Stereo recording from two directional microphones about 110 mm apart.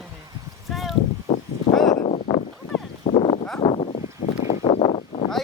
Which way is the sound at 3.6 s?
65° left (ahead or behind).